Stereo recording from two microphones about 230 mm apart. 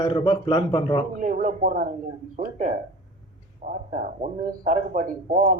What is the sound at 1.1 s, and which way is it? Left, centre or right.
Speech, right.